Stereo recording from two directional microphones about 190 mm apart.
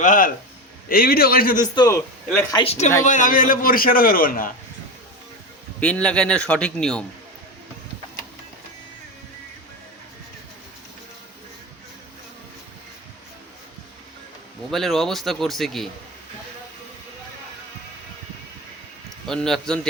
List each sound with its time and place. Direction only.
0.0 s a man's voice: 45° left (ahead or behind)
1.7 s a man's voice: 20° left (ahead or behind)
2.2 s a man's voice: 5° left (ahead or behind)
2.6 s a man's voice: 35° left (ahead or behind)
5.8 s a man's voice: 5° left (ahead or behind)
14.7 s a man's voice: centre (ahead or behind)
19.3 s a man's voice: 5° left (ahead or behind)